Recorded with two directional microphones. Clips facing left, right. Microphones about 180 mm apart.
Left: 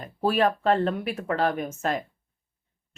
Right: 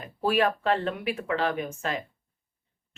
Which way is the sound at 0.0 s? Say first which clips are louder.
Left 2 dB; 40° left (ahead or behind).